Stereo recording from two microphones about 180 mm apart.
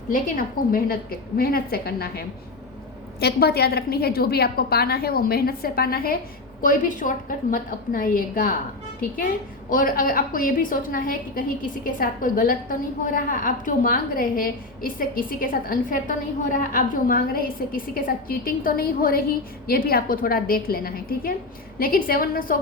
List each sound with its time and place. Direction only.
0.1 s a woman's voice: 50° left (ahead or behind)